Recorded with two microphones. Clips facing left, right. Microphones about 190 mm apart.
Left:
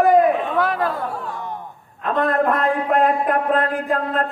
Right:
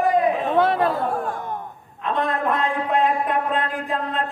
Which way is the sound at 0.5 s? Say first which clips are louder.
Right 2 dB; 25° right (ahead or behind).